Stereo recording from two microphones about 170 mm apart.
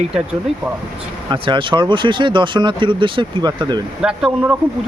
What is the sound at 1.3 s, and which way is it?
Speech, 30° right (ahead or behind).